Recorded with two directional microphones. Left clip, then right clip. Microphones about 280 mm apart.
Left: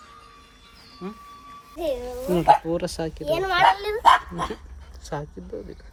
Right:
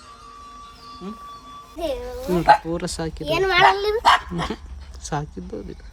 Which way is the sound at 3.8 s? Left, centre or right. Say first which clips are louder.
Right 1 dB; right.